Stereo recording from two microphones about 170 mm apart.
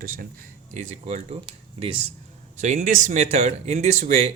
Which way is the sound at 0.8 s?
40° right (ahead or behind).